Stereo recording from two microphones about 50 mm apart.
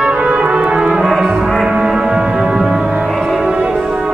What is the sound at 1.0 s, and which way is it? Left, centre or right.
Music, centre.